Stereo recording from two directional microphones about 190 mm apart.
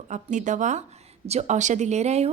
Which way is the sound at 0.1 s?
40° right (ahead or behind).